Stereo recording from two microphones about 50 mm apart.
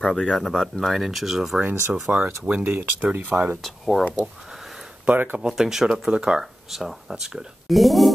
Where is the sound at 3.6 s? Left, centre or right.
Centre.